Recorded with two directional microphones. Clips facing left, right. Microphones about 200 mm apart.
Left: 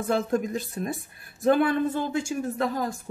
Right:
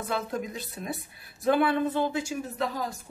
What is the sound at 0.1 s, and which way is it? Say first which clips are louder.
Speech: left 7 dB; 45° left (ahead or behind).